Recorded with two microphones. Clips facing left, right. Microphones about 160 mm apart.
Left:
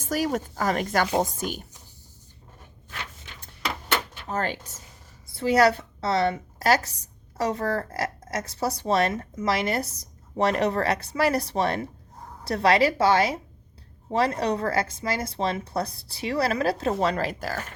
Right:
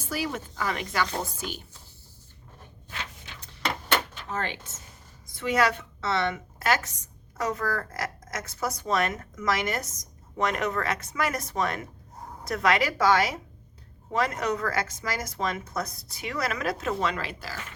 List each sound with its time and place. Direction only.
0.0 s speech: 45° left (ahead or behind)
4.3 s a woman's voice: 40° left (ahead or behind)